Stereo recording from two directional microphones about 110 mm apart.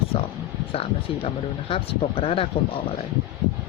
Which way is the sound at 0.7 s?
60° left (ahead or behind).